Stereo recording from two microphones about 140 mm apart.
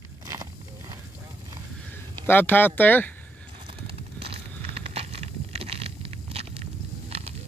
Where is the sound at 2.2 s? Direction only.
15° left (ahead or behind).